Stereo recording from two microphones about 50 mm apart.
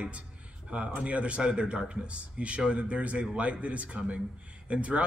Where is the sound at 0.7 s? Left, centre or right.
Right.